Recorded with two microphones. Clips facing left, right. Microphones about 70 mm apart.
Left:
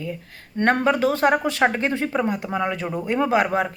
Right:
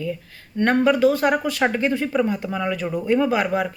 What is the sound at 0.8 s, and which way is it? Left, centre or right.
Speech, left.